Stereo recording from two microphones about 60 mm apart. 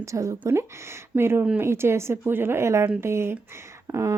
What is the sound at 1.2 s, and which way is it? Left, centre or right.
Speech, right.